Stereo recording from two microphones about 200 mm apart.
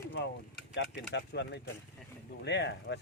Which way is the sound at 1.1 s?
60° left (ahead or behind).